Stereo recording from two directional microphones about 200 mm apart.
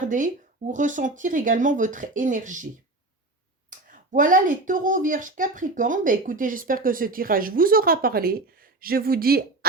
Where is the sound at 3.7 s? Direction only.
40° right (ahead or behind).